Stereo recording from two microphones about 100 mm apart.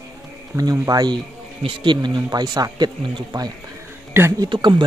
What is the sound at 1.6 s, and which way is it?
Speech, 55° right (ahead or behind).